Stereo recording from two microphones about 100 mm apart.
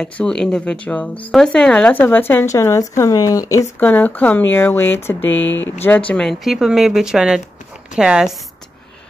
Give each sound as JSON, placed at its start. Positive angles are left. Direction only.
{"t": 0.0, "sound": "speech", "side_deg": 5}
{"t": 3.8, "sound": "speech", "side_deg": 15}
{"t": 6.4, "sound": "a woman's voice", "side_deg": -5}